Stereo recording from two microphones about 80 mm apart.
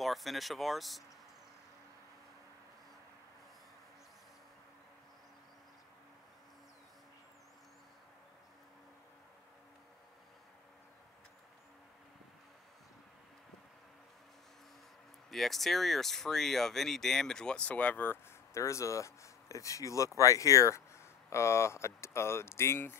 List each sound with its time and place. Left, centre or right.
0.0 s speech: centre
15.3 s speech: centre; by 18.2 s left
18.5 s speech: left